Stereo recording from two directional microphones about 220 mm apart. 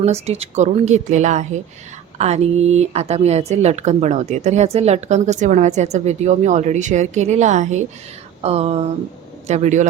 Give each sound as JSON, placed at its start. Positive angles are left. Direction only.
{"t": 0.0, "sound": "a woman's voice", "side_deg": -30}
{"t": 8.4, "sound": "a sound", "side_deg": -30}
{"t": 9.5, "sound": "a woman's voice", "side_deg": -30}